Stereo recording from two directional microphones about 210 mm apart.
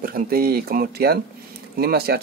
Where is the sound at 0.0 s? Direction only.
45° right (ahead or behind).